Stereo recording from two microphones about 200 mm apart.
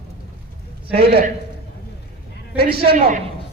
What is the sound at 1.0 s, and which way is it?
Speech, 55° right (ahead or behind).